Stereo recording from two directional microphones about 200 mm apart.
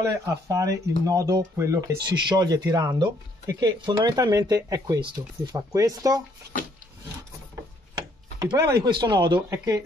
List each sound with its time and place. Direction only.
0.0 s speech: 15° right (ahead or behind)
7.9 s speech: 20° right (ahead or behind)